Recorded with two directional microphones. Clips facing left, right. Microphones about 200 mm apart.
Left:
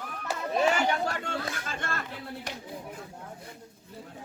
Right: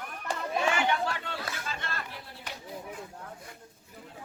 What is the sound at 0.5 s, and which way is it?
Chatter, 40° left (ahead or behind).